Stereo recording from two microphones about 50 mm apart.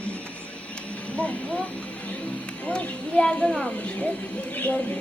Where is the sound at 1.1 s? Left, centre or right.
Left.